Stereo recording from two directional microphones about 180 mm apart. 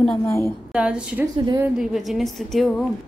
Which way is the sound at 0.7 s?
5° right (ahead or behind).